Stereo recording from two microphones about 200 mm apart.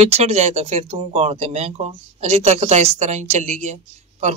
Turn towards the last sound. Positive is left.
turn(degrees=-35)  # may be behind; listen again after turning